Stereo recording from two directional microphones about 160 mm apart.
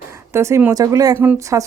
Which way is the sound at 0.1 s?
15° right (ahead or behind).